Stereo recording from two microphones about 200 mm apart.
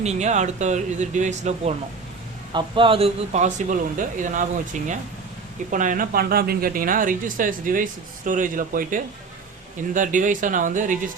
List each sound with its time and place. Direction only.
0.0 s a man's voice: 35° right (ahead or behind)
2.5 s a man's voice: 25° right (ahead or behind); by 11.1 s 40° right (ahead or behind)